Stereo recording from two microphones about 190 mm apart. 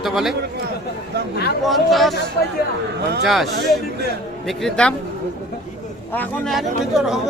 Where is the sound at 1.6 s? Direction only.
Centre (ahead or behind).